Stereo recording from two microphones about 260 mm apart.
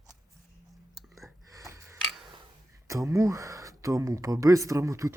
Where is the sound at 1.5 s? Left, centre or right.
Centre.